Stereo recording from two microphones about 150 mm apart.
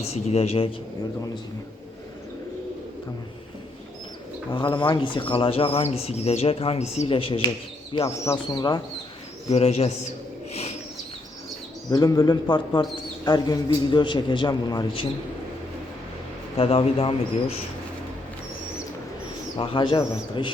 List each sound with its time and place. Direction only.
0.0 s a man's voice: 45° left (ahead or behind)
4.5 s speech: 30° left (ahead or behind)
8.0 s speech: 20° left (ahead or behind)
9.5 s a man's voice: 45° left (ahead or behind)
10.5 s bird: 45° left (ahead or behind)
11.9 s speech: 25° left (ahead or behind)
16.6 s speech: 40° left (ahead or behind)
19.5 s speech: 35° left (ahead or behind)